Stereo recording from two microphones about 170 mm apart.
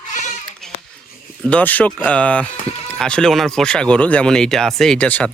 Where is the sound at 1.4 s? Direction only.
10° left (ahead or behind).